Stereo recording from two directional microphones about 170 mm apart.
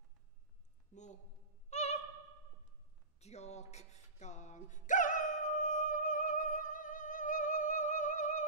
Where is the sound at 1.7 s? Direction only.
40° left (ahead or behind).